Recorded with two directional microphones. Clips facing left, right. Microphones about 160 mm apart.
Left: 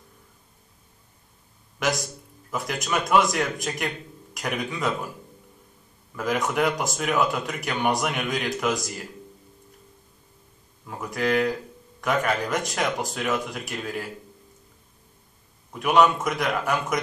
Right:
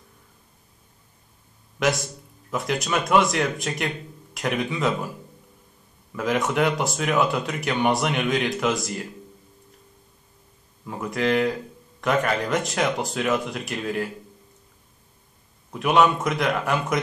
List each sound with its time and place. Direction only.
2.5 s speech: centre (ahead or behind)
6.1 s speech: centre (ahead or behind)
10.9 s speech: centre (ahead or behind)
15.8 s speech: centre (ahead or behind)